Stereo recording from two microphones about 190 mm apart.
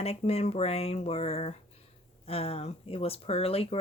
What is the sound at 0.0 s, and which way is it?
Speech, 35° left (ahead or behind).